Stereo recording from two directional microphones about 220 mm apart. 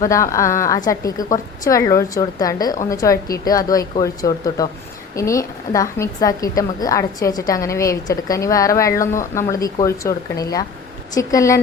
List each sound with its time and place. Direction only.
0.0 s a woman's voice: 15° left (ahead or behind)